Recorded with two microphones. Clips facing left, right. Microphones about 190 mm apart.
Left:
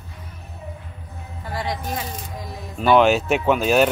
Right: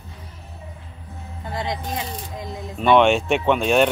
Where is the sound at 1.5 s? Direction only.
20° right (ahead or behind).